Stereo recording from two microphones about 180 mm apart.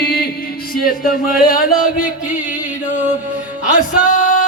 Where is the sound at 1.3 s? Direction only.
55° left (ahead or behind).